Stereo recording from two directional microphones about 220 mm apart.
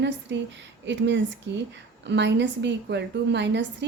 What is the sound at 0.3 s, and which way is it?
A woman's voice, 55° right (ahead or behind).